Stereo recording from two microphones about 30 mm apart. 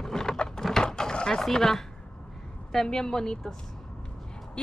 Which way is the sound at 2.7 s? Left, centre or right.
Left.